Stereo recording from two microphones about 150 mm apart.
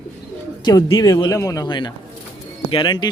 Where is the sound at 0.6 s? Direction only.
25° left (ahead or behind).